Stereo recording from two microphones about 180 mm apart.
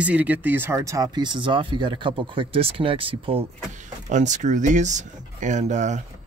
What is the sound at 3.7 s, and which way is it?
Speech, 40° right (ahead or behind).